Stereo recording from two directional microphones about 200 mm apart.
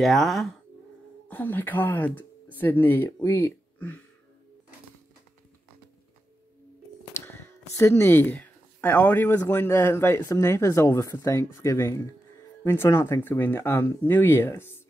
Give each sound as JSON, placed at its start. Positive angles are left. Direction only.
{"t": 0.0, "sound": "speech", "side_deg": 0}
{"t": 7.2, "sound": "speech", "side_deg": 15}